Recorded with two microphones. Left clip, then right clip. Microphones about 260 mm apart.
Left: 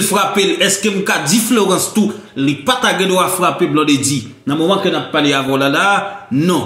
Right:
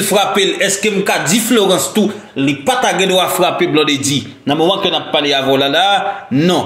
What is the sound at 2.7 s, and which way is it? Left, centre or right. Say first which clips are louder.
Speech: right 2 dB; left.